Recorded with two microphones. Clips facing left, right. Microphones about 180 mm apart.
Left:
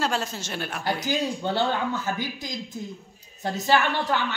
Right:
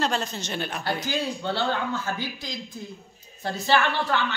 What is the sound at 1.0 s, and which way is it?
A woman's voice, 15° left (ahead or behind).